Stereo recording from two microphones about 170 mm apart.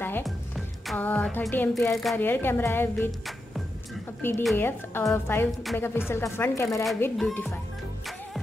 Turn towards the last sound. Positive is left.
turn(degrees=5)  # may be behind; listen again after turning